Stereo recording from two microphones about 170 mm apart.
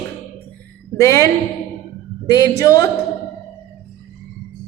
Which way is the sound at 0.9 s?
20° left (ahead or behind).